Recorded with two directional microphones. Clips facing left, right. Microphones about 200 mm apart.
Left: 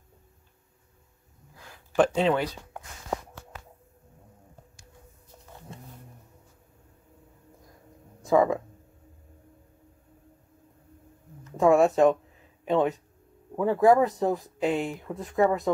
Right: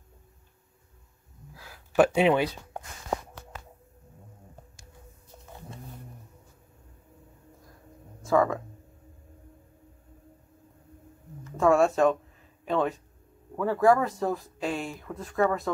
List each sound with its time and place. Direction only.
1.5 s a sound: 5° right (ahead or behind)
8.2 s speech: 15° left (ahead or behind)
11.5 s speech: 20° left (ahead or behind)